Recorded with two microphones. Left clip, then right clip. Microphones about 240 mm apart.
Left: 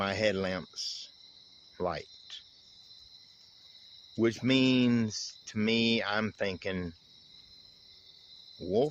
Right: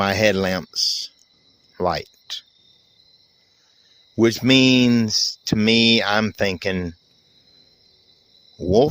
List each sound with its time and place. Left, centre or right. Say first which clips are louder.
0.0 s speech: right 11 dB; right
4.2 s speech: right 12 dB; right